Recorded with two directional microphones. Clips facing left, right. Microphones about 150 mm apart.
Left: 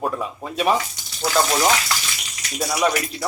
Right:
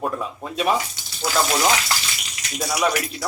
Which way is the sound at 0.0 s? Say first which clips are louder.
Left 1 dB; centre (ahead or behind).